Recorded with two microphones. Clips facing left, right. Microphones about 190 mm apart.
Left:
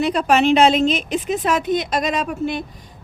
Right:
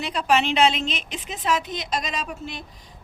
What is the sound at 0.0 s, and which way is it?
A woman's voice, 50° left (ahead or behind).